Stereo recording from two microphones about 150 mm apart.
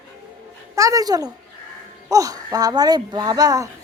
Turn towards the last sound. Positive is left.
turn(degrees=-25)  # may be behind; listen again after turning